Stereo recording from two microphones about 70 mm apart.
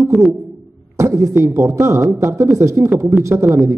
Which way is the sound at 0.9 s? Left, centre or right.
Right.